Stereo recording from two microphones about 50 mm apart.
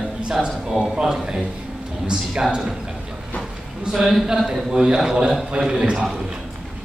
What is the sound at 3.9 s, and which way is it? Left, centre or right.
Speech, centre.